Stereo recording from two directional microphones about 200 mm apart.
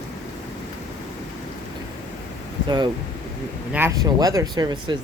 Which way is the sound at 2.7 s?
20° right (ahead or behind).